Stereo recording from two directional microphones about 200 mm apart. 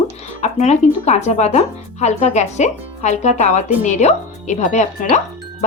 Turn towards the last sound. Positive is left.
turn(degrees=35)  # may be behind; listen again after turning